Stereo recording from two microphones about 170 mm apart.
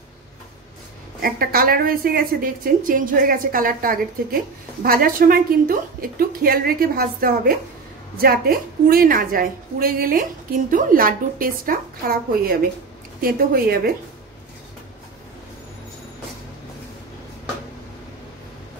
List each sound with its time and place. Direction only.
1.2 s a woman's voice: 60° right (ahead or behind)